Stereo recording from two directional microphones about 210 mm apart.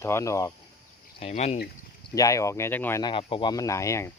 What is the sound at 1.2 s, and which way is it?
Speech, 30° left (ahead or behind).